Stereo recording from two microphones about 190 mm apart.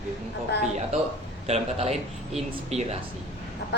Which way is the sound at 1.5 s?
35° right (ahead or behind).